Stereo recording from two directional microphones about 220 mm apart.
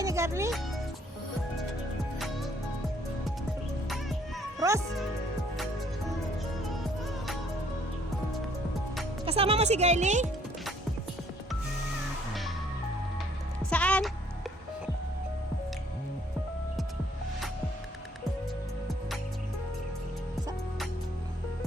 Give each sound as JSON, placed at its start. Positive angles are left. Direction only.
{"t": 0.0, "sound": "music", "side_deg": -15}
{"t": 6.7, "sound": "music", "side_deg": 0}
{"t": 9.2, "sound": "speech", "side_deg": -25}
{"t": 12.3, "sound": "music", "side_deg": 0}
{"t": 13.7, "sound": "music", "side_deg": 5}